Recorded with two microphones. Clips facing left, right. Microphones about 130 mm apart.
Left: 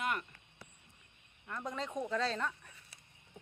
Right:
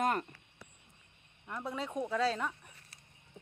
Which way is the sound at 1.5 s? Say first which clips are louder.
Right 1 dB; 10° right (ahead or behind).